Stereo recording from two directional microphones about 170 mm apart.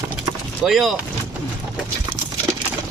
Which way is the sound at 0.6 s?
Centre (ahead or behind).